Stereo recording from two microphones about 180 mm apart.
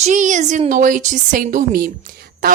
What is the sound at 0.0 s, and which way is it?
A woman's voice, 45° right (ahead or behind).